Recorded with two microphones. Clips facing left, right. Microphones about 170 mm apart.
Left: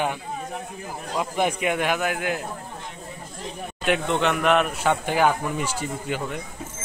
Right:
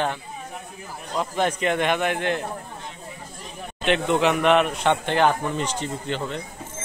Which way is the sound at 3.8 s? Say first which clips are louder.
Right 2 dB; centre (ahead or behind).